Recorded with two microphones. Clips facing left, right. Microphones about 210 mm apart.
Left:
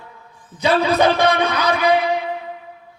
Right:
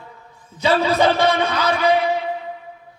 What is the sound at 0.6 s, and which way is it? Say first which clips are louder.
A man's voice: left 1 dB; 15° left (ahead or behind).